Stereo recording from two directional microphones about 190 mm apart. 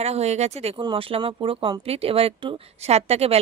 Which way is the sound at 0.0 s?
35° right (ahead or behind).